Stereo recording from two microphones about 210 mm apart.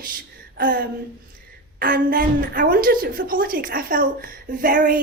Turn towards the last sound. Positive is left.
turn(degrees=-40)  # may be behind; listen again after turning